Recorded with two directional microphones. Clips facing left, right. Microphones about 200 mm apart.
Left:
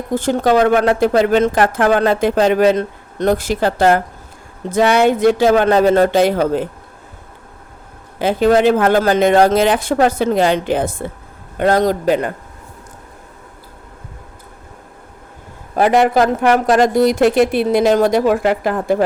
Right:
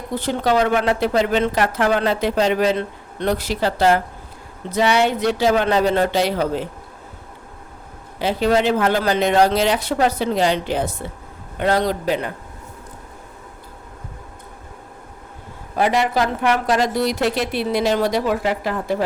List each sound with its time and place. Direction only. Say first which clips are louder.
0.1 s a woman's voice: left 5 dB; 45° left (ahead or behind)
8.2 s a woman's voice: left 5 dB; 50° left (ahead or behind)
15.7 s a woman's voice: left 6 dB; 50° left (ahead or behind)